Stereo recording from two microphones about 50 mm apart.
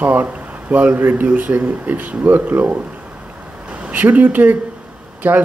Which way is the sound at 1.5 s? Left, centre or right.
Right.